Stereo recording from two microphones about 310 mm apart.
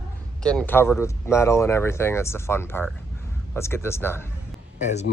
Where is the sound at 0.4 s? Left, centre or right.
Centre.